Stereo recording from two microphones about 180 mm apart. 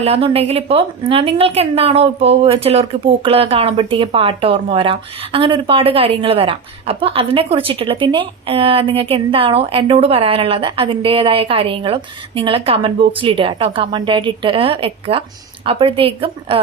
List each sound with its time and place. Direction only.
0.0 s speech: 35° right (ahead or behind)